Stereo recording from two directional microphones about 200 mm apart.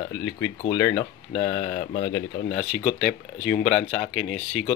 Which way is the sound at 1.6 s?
45° left (ahead or behind).